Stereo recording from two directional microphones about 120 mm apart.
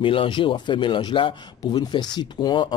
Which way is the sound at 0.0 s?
45° left (ahead or behind).